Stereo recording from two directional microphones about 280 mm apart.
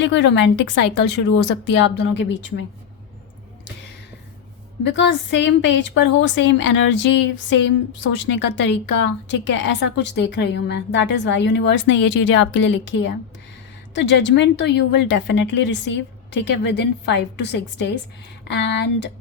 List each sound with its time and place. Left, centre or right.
0.0 s a woman's voice: left
4.8 s a woman's voice: left